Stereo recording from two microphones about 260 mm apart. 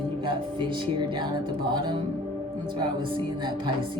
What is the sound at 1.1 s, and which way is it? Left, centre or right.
Speech, centre.